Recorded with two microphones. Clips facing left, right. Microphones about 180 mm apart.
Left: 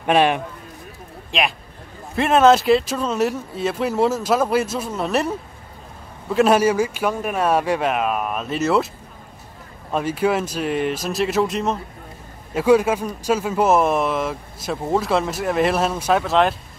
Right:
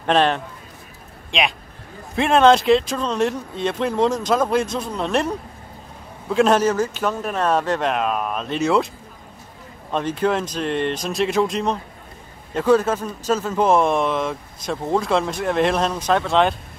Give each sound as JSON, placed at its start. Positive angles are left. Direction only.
{"t": 0.0, "sound": "speech", "side_deg": 10}
{"t": 9.8, "sound": "speech", "side_deg": 5}